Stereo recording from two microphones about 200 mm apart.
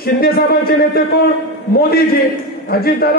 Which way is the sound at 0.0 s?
50° left (ahead or behind).